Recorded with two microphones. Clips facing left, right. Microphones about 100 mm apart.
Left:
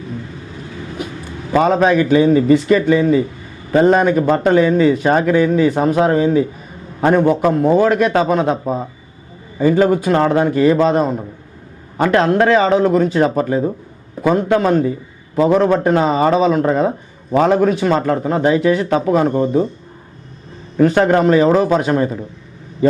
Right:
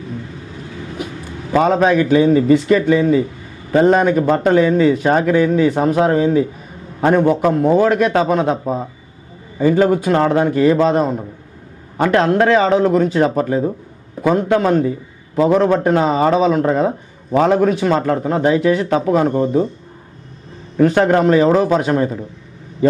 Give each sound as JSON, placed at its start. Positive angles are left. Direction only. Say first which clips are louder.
{"t": 1.5, "sound": "a man's voice", "louder": "even", "side_deg": 15}
{"t": 20.8, "sound": "a man's voice", "louder": "even", "side_deg": 15}